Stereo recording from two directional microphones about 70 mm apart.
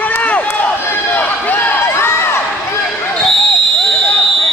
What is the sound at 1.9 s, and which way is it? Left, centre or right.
Crowd, left.